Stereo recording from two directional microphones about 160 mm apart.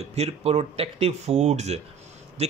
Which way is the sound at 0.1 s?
40° right (ahead or behind).